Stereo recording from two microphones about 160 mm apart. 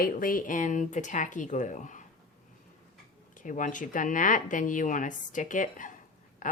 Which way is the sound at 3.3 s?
55° left (ahead or behind).